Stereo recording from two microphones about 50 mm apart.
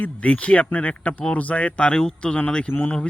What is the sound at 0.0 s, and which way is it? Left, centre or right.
A man's voice, left.